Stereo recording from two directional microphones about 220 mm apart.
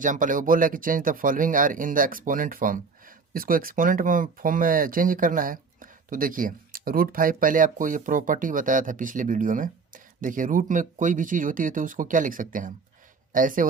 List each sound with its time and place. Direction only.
0.0 s speech: 35° right (ahead or behind)